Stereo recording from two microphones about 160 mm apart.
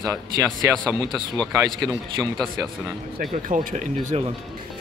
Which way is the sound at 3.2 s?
55° right (ahead or behind).